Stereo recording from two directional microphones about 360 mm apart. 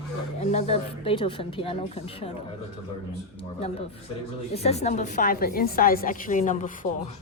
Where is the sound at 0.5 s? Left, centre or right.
Centre.